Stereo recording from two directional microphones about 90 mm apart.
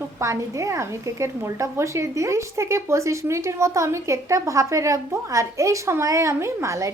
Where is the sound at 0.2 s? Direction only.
35° right (ahead or behind).